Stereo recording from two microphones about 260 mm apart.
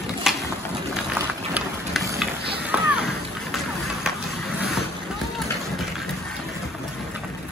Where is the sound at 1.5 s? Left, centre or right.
Centre.